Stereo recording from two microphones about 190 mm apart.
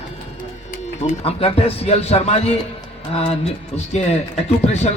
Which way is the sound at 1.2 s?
30° left (ahead or behind).